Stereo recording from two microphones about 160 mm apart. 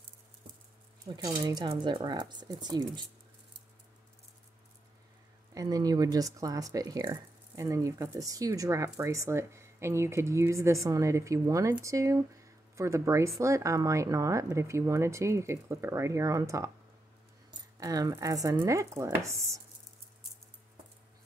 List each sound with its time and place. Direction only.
1.0 s speech: 25° right (ahead or behind)
5.5 s speech: 20° right (ahead or behind)